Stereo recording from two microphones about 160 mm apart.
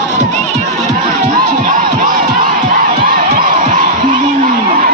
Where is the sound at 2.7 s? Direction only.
60° right (ahead or behind).